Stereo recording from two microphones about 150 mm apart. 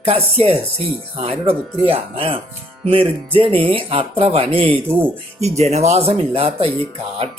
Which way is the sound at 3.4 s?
35° right (ahead or behind).